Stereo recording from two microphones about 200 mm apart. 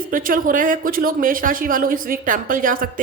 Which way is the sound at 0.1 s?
45° right (ahead or behind).